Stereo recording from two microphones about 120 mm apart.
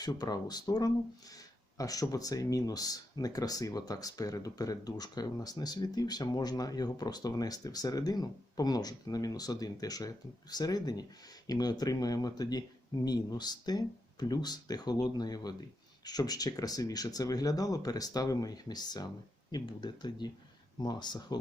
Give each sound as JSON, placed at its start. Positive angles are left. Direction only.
{"t": 0.0, "sound": "speech", "side_deg": 35}